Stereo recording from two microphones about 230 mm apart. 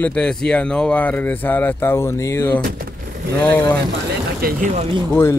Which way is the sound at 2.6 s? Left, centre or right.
Right.